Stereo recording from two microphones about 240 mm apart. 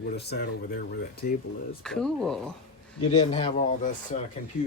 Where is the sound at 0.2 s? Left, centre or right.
Left.